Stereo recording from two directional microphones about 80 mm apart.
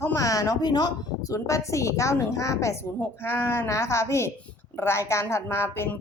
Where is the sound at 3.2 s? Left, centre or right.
Left.